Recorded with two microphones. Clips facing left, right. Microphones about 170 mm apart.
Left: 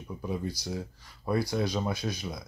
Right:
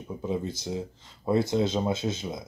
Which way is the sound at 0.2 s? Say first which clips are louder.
Right 3 dB; 20° right (ahead or behind).